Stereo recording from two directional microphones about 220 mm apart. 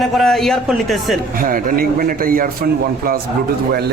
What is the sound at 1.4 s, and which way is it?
A man's voice, 40° right (ahead or behind).